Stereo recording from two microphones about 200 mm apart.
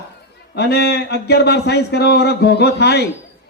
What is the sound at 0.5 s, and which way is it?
A man's voice, 55° left (ahead or behind).